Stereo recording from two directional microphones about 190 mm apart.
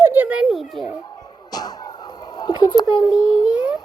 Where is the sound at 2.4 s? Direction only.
20° left (ahead or behind).